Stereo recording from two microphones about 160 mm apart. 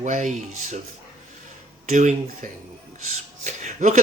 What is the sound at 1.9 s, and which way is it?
Speech, 50° right (ahead or behind).